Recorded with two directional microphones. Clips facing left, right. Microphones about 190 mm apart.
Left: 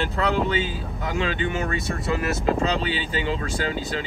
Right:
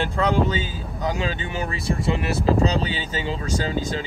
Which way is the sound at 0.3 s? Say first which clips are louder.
Right 1 dB; 40° right (ahead or behind).